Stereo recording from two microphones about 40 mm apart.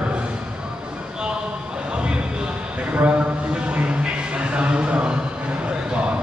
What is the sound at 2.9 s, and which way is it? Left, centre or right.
Speech, right.